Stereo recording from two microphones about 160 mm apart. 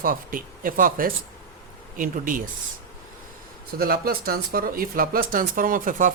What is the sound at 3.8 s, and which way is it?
Speech, 70° right (ahead or behind).